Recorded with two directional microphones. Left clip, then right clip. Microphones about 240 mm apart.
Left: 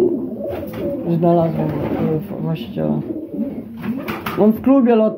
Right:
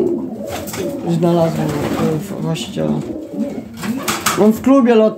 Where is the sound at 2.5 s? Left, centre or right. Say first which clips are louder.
Right 3 dB; centre.